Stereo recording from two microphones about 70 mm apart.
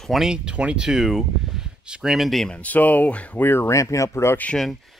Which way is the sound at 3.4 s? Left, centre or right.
Left.